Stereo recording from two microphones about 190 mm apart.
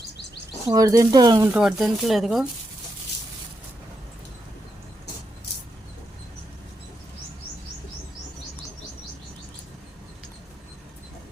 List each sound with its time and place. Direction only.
0.7 s speech: 20° right (ahead or behind)
1.5 s speech: centre (ahead or behind)